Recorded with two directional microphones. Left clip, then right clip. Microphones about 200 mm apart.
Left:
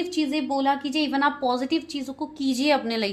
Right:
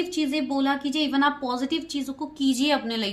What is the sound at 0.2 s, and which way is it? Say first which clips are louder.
A woman's voice: left 2 dB; 30° left (ahead or behind).